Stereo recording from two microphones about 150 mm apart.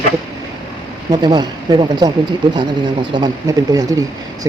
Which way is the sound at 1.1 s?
30° right (ahead or behind).